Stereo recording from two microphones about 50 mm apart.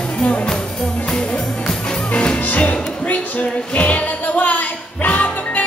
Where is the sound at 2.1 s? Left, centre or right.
Left.